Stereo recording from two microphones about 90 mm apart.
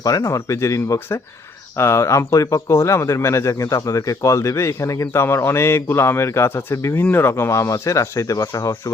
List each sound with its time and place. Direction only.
0.0 s speech: 40° left (ahead or behind)